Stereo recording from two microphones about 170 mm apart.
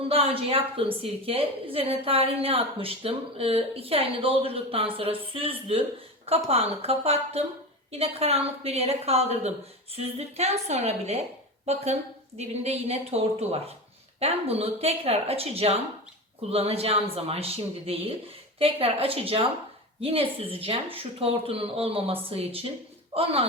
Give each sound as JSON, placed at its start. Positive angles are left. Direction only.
{"t": 0.1, "sound": "a woman's voice", "side_deg": -35}